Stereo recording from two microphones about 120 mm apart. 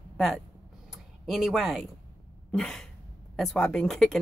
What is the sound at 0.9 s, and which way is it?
Speech, 5° right (ahead or behind).